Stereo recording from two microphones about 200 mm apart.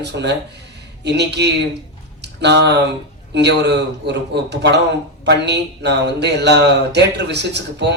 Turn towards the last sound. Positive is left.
turn(degrees=-60)  # may be behind; listen again after turning